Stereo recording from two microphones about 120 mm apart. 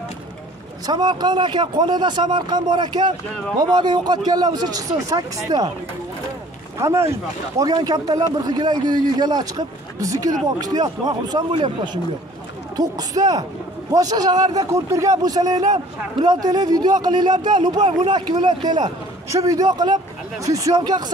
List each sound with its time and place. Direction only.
0.8 s a man's voice: 35° right (ahead or behind)
6.8 s a man's voice: 25° right (ahead or behind)